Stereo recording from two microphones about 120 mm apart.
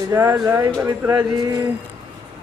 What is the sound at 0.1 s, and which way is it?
Speech, 20° right (ahead or behind).